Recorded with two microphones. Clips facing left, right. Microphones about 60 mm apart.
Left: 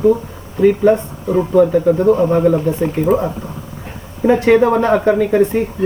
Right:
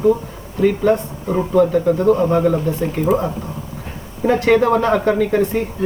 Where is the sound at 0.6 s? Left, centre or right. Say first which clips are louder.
Left 4 dB; centre.